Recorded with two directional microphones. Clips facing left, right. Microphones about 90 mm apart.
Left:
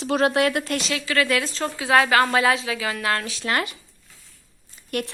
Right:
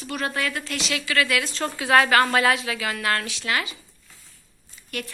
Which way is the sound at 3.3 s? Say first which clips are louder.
Left 2 dB; 35° left (ahead or behind).